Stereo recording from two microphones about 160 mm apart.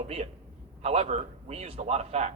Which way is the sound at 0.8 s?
40° right (ahead or behind).